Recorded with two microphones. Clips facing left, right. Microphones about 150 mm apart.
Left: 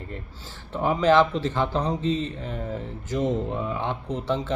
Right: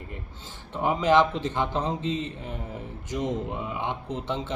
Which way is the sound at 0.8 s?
15° right (ahead or behind).